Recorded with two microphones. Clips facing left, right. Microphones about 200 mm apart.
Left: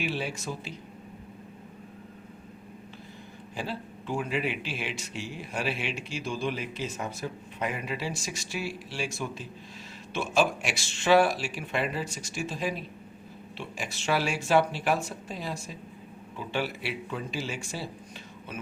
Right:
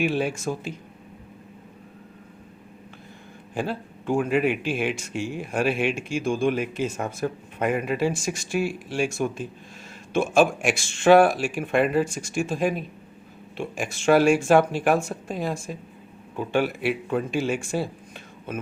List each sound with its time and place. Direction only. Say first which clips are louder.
0.0 s speech: right 8 dB; 50° right (ahead or behind)
3.5 s speech: right 7 dB; 50° right (ahead or behind)